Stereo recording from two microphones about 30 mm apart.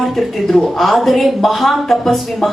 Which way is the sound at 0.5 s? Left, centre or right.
Centre.